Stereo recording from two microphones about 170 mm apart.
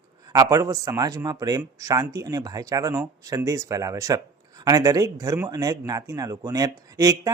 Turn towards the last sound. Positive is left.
turn(degrees=-20)  # may be behind; listen again after turning